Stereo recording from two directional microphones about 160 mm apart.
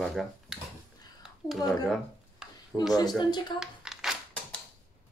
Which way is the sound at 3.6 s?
5° right (ahead or behind).